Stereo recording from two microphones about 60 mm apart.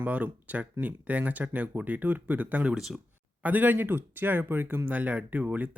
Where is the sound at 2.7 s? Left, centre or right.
Centre.